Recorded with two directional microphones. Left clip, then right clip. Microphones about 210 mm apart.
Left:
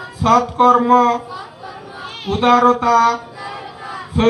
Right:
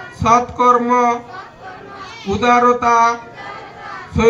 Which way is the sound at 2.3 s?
25° right (ahead or behind).